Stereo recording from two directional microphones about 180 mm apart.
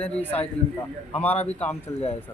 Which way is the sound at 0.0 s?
10° left (ahead or behind).